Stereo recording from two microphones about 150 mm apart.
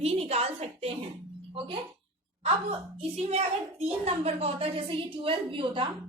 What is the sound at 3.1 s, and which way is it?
A woman's voice, 45° right (ahead or behind).